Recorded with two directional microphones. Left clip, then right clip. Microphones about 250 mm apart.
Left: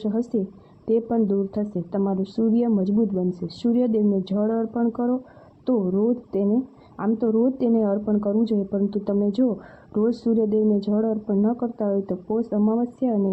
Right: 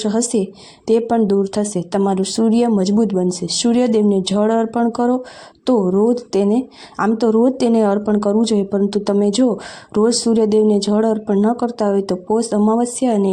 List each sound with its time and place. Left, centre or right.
0.0 s a woman's voice: centre